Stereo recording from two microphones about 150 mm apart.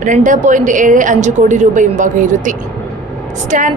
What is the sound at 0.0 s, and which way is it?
A woman's voice, 55° right (ahead or behind).